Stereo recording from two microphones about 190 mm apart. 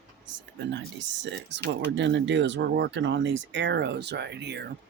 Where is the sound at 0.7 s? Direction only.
70° right (ahead or behind).